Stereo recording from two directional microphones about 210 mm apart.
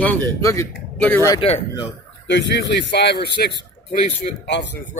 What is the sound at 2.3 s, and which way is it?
Speech, 55° left (ahead or behind).